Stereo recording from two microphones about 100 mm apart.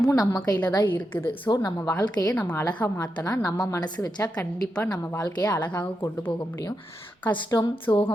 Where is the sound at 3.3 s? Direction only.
30° left (ahead or behind).